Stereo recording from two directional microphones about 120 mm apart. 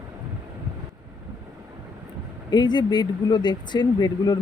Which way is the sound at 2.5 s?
35° left (ahead or behind).